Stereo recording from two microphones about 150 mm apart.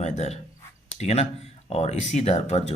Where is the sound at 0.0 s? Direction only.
45° left (ahead or behind).